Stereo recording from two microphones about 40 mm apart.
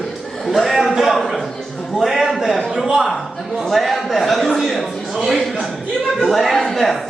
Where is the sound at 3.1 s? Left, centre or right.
Centre.